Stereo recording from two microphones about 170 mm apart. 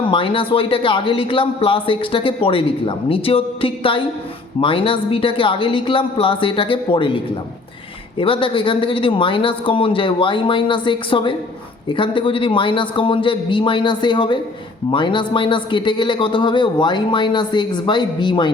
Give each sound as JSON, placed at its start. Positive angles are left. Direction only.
{"t": 0.1, "sound": "a man's voice", "side_deg": 30}
{"t": 8.2, "sound": "speech", "side_deg": 30}